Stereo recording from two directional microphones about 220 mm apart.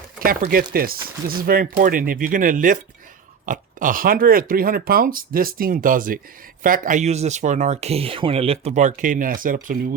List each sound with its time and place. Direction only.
0.3 s speech: 40° right (ahead or behind)